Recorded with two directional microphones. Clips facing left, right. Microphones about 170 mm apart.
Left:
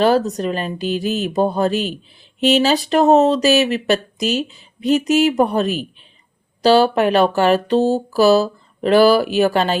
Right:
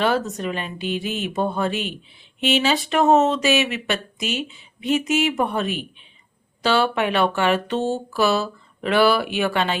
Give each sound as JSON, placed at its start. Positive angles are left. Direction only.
{"t": 0.0, "sound": "speech", "side_deg": 35}